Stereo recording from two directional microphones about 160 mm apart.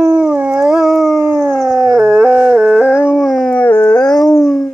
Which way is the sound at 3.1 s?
Centre (ahead or behind).